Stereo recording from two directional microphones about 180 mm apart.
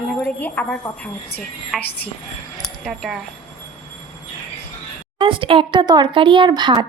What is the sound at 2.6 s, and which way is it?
Keys jangling, centre (ahead or behind).